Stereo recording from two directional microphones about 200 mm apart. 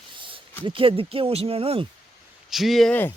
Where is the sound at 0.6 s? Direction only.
25° right (ahead or behind).